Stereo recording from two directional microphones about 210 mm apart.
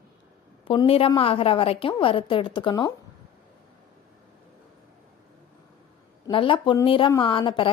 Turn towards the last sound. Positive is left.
turn(degrees=25)  # may be behind; listen again after turning